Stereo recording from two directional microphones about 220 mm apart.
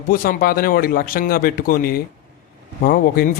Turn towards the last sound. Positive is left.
turn(degrees=40)  # may be behind; listen again after turning